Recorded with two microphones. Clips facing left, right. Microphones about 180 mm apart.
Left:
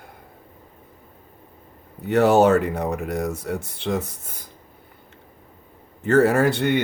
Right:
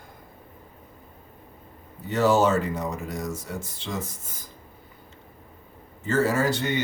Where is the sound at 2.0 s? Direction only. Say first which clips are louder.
Left 5 dB; 60° left (ahead or behind).